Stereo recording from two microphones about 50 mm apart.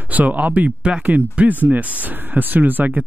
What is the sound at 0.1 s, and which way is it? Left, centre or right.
Speech, right.